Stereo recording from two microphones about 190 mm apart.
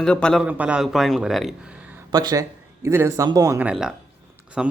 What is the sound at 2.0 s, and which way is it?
Speech, 20° right (ahead or behind).